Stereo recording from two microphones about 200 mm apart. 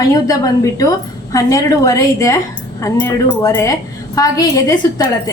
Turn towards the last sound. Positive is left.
turn(degrees=20)  # may be behind; listen again after turning